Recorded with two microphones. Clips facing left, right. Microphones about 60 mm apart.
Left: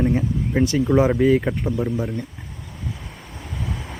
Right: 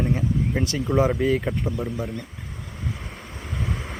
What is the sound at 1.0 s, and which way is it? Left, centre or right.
Speech, centre.